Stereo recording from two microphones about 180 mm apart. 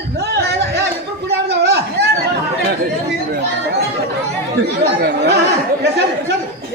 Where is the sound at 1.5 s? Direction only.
65° right (ahead or behind).